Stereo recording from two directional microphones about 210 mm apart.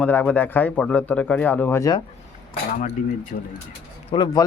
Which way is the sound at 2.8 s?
40° left (ahead or behind).